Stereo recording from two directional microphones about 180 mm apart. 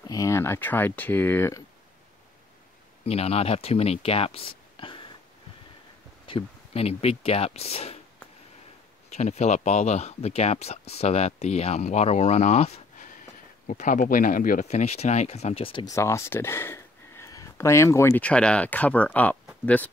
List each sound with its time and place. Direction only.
0.0 s speech: 20° left (ahead or behind)
3.1 s speech: 35° left (ahead or behind)
6.2 s speech: 30° left (ahead or behind)
9.1 s speech: 40° left (ahead or behind)
13.7 s speech: 45° left (ahead or behind); by 19.9 s 10° left (ahead or behind)